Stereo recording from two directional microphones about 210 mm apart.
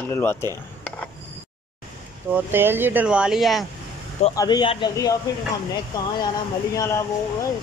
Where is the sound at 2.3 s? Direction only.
10° right (ahead or behind).